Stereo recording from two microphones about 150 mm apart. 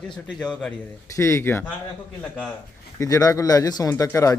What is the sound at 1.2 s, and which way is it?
Speech, 20° left (ahead or behind).